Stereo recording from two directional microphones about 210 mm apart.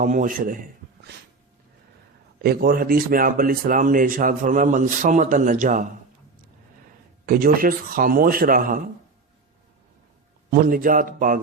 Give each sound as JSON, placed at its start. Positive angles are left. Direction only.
{"t": 0.0, "sound": "speech", "side_deg": -40}
{"t": 2.4, "sound": "speech", "side_deg": -45}
{"t": 7.3, "sound": "speech", "side_deg": -40}
{"t": 10.5, "sound": "speech", "side_deg": -40}